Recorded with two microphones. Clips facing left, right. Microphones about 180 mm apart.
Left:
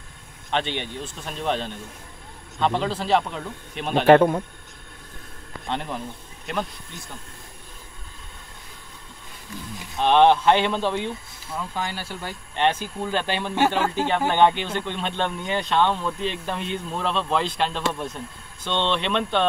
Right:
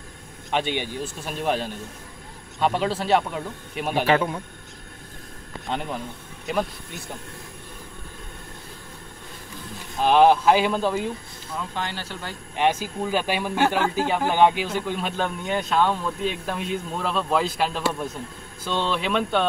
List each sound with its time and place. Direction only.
0.5 s a man's voice: 5° right (ahead or behind)
4.0 s speech: 50° left (ahead or behind)
5.7 s speech: centre (ahead or behind)
9.9 s speech: 5° right (ahead or behind)
11.5 s speech: 10° left (ahead or behind)
12.5 s a man's voice: 10° right (ahead or behind)